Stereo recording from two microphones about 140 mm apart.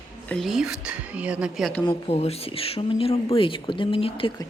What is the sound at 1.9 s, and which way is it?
Speech, 45° left (ahead or behind).